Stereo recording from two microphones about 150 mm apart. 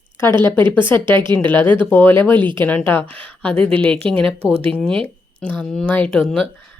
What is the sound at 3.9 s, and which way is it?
Speech, 40° right (ahead or behind).